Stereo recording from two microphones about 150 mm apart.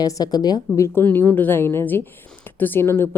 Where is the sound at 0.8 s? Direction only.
15° left (ahead or behind).